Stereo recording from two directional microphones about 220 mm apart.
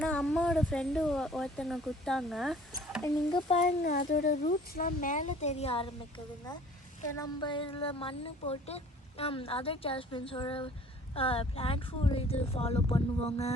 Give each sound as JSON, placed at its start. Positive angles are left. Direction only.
{"t": 0.0, "sound": "speech", "side_deg": 5}
{"t": 3.0, "sound": "speech", "side_deg": 20}
{"t": 3.9, "sound": "speech", "side_deg": 45}